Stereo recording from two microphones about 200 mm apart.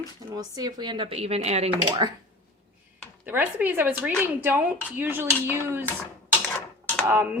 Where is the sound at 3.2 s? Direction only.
10° right (ahead or behind).